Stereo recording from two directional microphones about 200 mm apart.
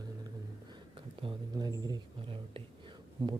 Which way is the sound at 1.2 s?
20° right (ahead or behind).